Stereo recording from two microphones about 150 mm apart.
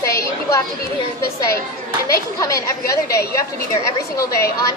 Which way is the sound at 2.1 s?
20° left (ahead or behind).